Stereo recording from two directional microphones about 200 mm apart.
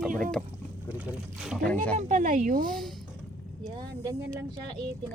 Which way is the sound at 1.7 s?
10° left (ahead or behind).